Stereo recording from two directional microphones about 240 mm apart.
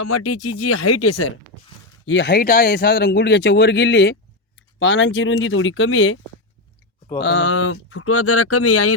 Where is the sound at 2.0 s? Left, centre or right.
Left.